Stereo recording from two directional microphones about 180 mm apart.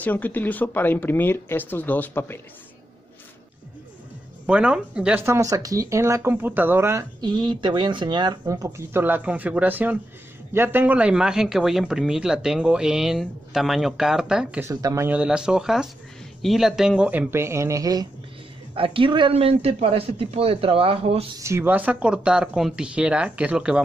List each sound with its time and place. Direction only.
0.0 s speech: 10° left (ahead or behind)
4.5 s speech: 5° right (ahead or behind)
14.7 s a man's voice: 20° right (ahead or behind)
21.4 s speech: 15° right (ahead or behind)